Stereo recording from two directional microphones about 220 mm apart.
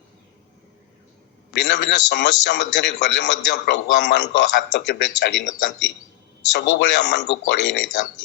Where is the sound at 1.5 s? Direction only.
55° left (ahead or behind).